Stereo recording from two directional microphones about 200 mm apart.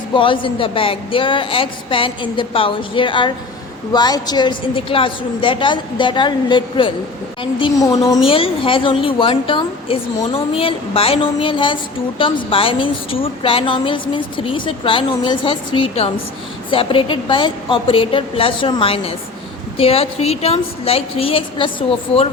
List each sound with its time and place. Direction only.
0.1 s a woman's voice: 25° left (ahead or behind)
8.3 s a woman's voice: 25° left (ahead or behind)